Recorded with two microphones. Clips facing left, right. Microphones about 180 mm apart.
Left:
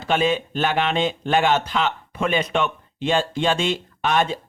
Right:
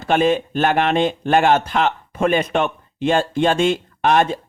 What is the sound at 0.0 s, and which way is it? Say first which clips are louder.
Speech: right 4 dB; 50° right (ahead or behind).